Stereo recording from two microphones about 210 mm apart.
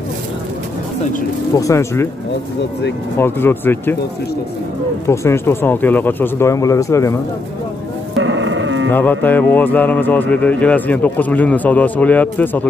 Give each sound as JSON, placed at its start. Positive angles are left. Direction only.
{"t": 1.5, "sound": "speech", "side_deg": 15}
{"t": 3.2, "sound": "speech", "side_deg": 10}
{"t": 5.0, "sound": "speech", "side_deg": 15}
{"t": 8.2, "sound": "a sound", "side_deg": -65}
{"t": 8.9, "sound": "speech", "side_deg": 10}